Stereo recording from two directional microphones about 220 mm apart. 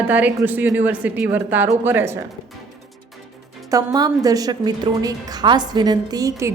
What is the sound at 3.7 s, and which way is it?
A woman's voice, 15° right (ahead or behind).